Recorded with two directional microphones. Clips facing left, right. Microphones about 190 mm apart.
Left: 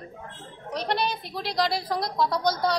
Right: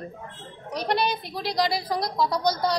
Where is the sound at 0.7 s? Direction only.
Centre (ahead or behind).